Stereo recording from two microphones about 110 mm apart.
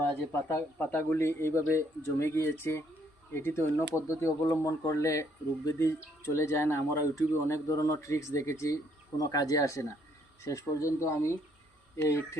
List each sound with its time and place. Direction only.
0.0 s speech: 20° left (ahead or behind)